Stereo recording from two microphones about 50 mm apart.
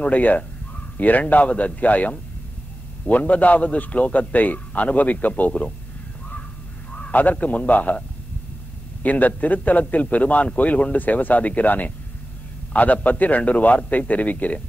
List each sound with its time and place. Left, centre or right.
0.0 s a man's voice: left
6.9 s a man's voice: left
9.0 s a man's voice: left